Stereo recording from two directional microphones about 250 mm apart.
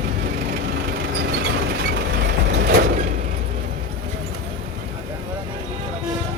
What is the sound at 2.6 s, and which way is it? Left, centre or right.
Vehicle, right.